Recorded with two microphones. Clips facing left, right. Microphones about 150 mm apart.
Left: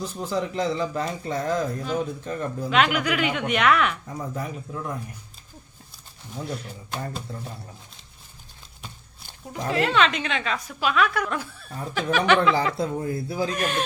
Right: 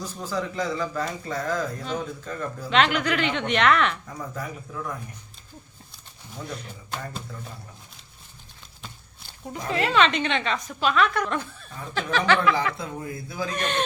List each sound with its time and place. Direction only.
0.0 s speech: 20° left (ahead or behind)
2.6 s a woman's voice: 5° left (ahead or behind)
4.0 s speech: 25° left (ahead or behind)
6.4 s a woman's voice: 5° left (ahead or behind)
7.3 s speech: 30° left (ahead or behind)
9.6 s a woman's voice: centre (ahead or behind)
12.1 s speech: 20° left (ahead or behind)
12.5 s speech: 35° left (ahead or behind)
13.5 s a woman's voice: 5° left (ahead or behind)